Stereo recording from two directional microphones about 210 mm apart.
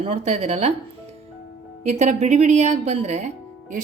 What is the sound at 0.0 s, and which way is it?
Speech, 30° right (ahead or behind).